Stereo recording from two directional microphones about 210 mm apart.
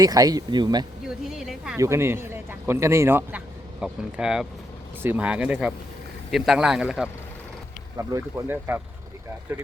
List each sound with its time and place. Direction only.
0.0 s speech: 15° right (ahead or behind)
1.0 s speech: centre (ahead or behind)
7.9 s speech: 15° right (ahead or behind)